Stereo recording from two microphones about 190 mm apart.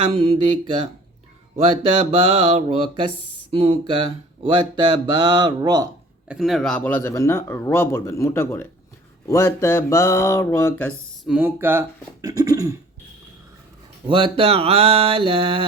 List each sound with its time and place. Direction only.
0.0 s mantra: 30° right (ahead or behind)
6.2 s speech: centre (ahead or behind)
11.3 s speech: 10° right (ahead or behind)
14.1 s mantra: 30° right (ahead or behind)